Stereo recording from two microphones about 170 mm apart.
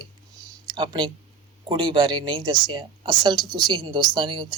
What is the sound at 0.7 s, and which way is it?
Speech, 25° right (ahead or behind).